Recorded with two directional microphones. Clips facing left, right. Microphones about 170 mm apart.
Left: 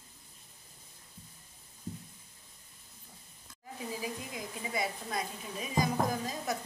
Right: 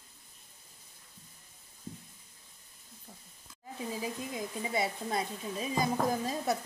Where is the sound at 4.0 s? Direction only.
25° right (ahead or behind).